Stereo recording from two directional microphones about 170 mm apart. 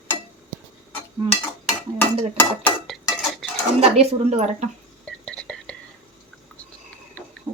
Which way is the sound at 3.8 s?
40° right (ahead or behind).